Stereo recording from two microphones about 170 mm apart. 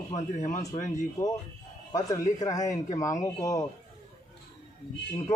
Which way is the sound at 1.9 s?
20° left (ahead or behind).